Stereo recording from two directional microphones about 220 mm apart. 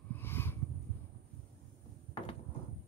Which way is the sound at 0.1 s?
10° left (ahead or behind).